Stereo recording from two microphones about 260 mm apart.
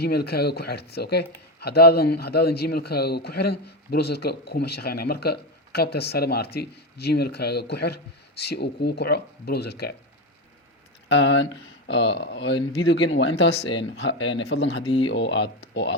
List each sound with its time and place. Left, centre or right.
0.0 s speech: left
11.1 s speech: left